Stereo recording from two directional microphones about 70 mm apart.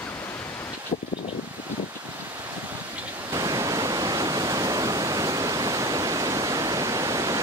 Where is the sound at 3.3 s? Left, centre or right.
Right.